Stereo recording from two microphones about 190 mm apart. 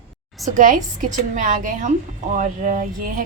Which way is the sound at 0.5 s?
45° right (ahead or behind).